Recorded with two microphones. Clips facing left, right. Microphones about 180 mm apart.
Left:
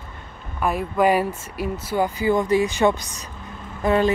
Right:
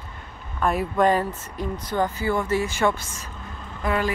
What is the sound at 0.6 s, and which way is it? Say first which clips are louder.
Speech: left 1 dB; 5° left (ahead or behind).